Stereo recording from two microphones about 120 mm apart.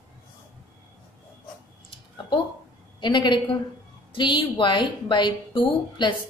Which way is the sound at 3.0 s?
40° left (ahead or behind).